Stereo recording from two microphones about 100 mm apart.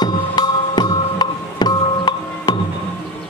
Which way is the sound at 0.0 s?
45° left (ahead or behind).